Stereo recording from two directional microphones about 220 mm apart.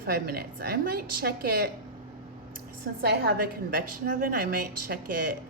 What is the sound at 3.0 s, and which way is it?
Speech, 45° right (ahead or behind).